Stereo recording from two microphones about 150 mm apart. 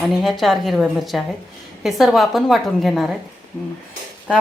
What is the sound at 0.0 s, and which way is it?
A woman's voice, centre (ahead or behind).